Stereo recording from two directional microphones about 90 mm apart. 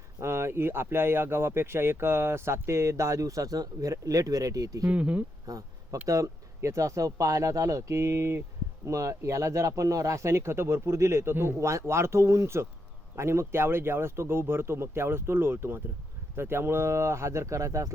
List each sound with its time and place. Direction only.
0.2 s speech: 30° right (ahead or behind)
4.9 s speech: 15° right (ahead or behind)
5.5 s a sound: 40° right (ahead or behind)
6.1 s speech: 40° right (ahead or behind)